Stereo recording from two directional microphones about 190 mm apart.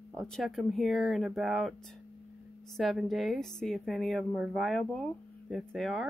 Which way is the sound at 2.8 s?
Centre (ahead or behind).